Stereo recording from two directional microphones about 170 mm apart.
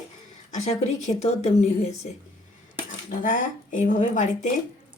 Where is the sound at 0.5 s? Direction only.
40° left (ahead or behind).